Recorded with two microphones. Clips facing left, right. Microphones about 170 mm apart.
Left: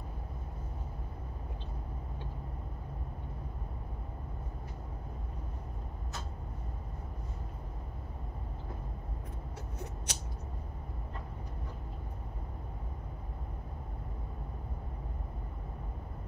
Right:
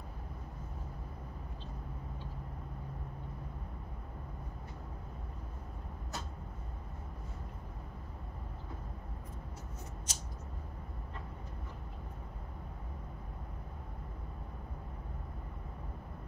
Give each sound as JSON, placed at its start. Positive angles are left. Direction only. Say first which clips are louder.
{"t": 10.1, "sound": "creak", "louder": "left 4 dB", "side_deg": 65}